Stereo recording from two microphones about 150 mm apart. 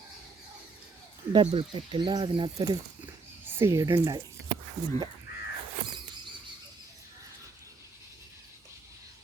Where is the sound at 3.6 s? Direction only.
20° right (ahead or behind).